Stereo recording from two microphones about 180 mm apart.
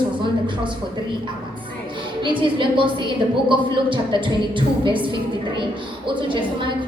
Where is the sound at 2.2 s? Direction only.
25° right (ahead or behind).